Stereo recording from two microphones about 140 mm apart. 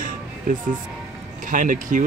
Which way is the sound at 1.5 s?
70° right (ahead or behind).